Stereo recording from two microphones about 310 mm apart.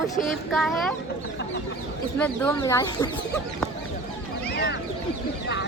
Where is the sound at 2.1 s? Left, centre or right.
Centre.